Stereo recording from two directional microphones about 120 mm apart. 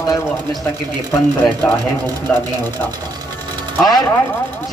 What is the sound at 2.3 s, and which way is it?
Speech, 10° left (ahead or behind).